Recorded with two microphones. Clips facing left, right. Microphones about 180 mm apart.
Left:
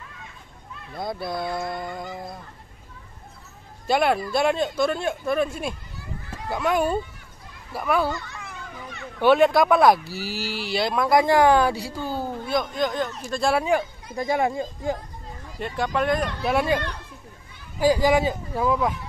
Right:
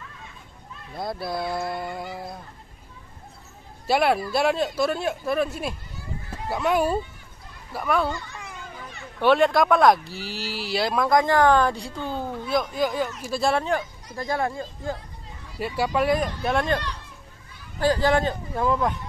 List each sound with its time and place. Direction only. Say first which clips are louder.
0.9 s speech: even; centre (ahead or behind)
3.8 s speech: even; 5° right (ahead or behind)
9.2 s a man's voice: left 2 dB; centre (ahead or behind)
15.6 s speech: right 1 dB; 5° right (ahead or behind)
16.4 s a man's voice: left 3 dB; 5° left (ahead or behind)